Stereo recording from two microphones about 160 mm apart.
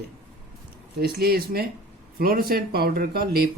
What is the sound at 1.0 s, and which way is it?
Speech, 75° right (ahead or behind).